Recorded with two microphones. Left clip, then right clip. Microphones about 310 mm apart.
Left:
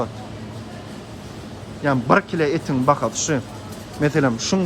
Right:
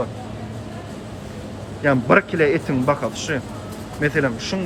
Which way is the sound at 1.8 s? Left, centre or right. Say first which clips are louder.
Right 2 dB; centre.